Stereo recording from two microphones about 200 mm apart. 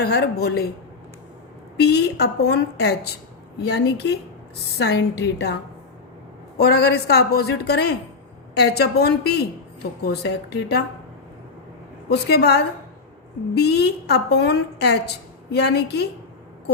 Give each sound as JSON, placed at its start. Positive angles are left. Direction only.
{"t": 0.0, "sound": "a woman's voice", "side_deg": 50}
{"t": 1.8, "sound": "a woman's voice", "side_deg": 55}
{"t": 6.6, "sound": "a woman's voice", "side_deg": 55}
{"t": 12.0, "sound": "a woman's voice", "side_deg": 55}